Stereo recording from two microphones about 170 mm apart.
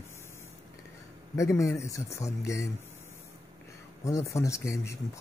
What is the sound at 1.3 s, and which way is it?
Speech, 20° left (ahead or behind).